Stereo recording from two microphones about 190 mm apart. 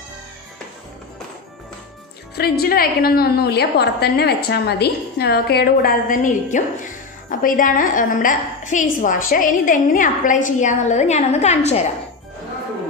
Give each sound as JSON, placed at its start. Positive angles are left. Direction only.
{"t": 2.3, "sound": "a woman's voice", "side_deg": 55}